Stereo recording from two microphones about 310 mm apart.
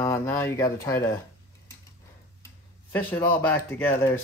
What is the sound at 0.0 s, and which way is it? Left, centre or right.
Speech, centre.